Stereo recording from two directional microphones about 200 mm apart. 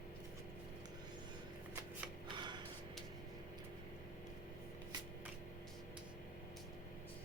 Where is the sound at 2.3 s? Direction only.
20° right (ahead or behind).